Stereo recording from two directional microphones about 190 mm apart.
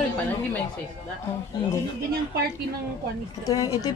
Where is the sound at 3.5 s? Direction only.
20° left (ahead or behind).